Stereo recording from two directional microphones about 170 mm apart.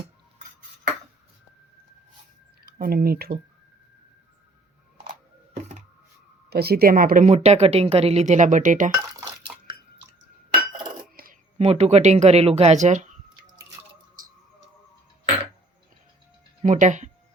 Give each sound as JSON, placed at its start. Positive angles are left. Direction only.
{"t": 2.6, "sound": "speech", "side_deg": -60}
{"t": 6.5, "sound": "speech", "side_deg": -70}
{"t": 9.0, "sound": "chink", "side_deg": -25}
{"t": 11.1, "sound": "coin", "side_deg": -55}
{"t": 11.5, "sound": "speech", "side_deg": -40}
{"t": 16.6, "sound": "speech", "side_deg": -45}